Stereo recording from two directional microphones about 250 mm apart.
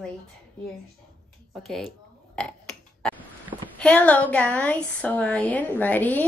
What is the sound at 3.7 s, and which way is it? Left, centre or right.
A woman's voice, centre.